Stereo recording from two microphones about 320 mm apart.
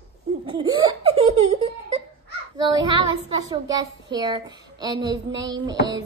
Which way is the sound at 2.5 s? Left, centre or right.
Centre.